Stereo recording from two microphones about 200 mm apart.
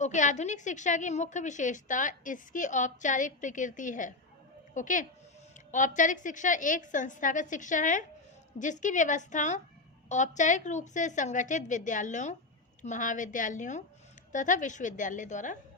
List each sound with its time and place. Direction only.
0.0 s a woman's voice: 40° left (ahead or behind)